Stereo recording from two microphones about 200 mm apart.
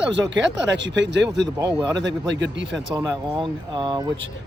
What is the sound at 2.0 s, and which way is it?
Speech, 60° right (ahead or behind).